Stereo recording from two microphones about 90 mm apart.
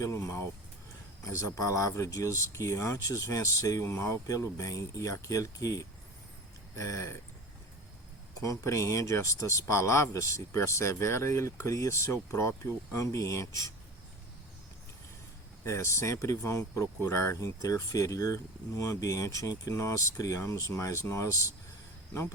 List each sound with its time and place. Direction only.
0.0 s a sound: 35° left (ahead or behind)
1.2 s speech: 40° left (ahead or behind)
8.4 s speech: 35° left (ahead or behind)
15.6 s speech: 30° left (ahead or behind)